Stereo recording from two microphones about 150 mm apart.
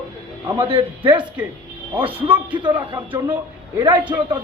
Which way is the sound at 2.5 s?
30° right (ahead or behind).